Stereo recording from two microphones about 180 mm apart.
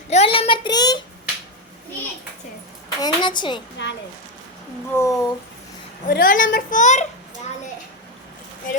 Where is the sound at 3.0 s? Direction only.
25° left (ahead or behind).